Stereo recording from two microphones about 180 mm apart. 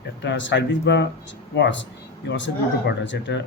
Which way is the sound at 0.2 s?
90° left.